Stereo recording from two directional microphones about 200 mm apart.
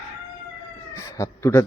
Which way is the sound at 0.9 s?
15° left (ahead or behind).